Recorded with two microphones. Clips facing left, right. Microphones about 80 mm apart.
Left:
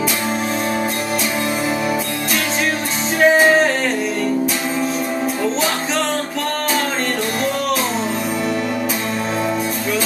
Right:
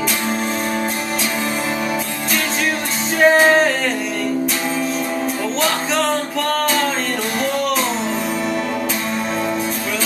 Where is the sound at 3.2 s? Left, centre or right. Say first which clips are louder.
Even; centre.